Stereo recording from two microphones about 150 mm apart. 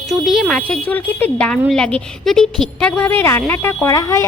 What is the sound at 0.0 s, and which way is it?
A woman's voice, centre (ahead or behind).